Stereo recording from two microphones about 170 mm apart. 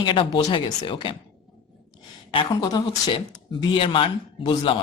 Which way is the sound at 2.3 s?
25° left (ahead or behind).